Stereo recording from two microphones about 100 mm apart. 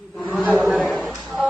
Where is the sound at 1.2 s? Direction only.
10° left (ahead or behind).